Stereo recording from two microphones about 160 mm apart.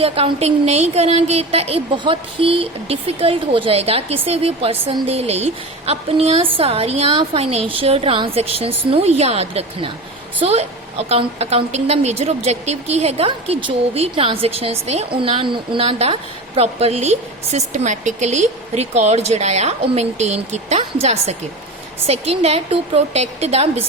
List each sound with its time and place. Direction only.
0.0 s a woman's voice: 40° right (ahead or behind)